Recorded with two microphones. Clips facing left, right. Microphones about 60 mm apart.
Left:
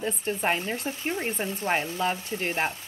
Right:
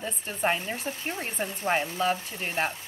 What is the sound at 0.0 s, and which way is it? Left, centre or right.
Speech, centre.